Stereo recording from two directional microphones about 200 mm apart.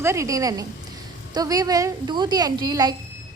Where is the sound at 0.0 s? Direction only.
15° right (ahead or behind).